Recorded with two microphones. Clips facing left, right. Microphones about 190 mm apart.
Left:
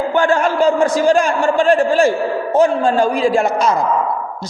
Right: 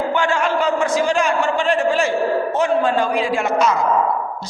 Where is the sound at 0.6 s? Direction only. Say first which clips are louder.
Left 5 dB; 35° left (ahead or behind).